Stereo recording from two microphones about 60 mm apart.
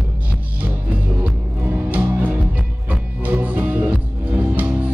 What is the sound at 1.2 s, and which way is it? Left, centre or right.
Music, right.